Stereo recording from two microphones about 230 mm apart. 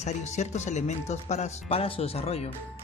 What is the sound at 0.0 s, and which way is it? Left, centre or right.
Speech, left.